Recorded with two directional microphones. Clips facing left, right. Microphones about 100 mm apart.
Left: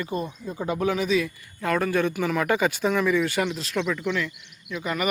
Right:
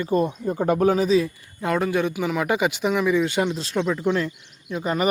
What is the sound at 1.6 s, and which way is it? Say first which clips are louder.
Speech: right 1 dB; 20° right (ahead or behind).